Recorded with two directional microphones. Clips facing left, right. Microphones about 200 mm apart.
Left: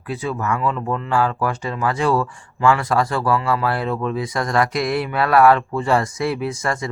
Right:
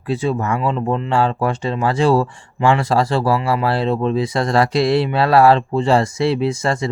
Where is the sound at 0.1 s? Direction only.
25° right (ahead or behind).